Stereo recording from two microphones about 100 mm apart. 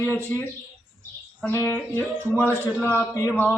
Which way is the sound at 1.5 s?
20° left (ahead or behind).